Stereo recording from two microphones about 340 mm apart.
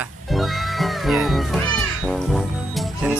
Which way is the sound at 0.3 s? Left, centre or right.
Centre.